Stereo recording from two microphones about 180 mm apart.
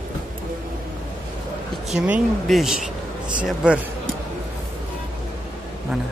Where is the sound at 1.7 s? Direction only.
5° right (ahead or behind).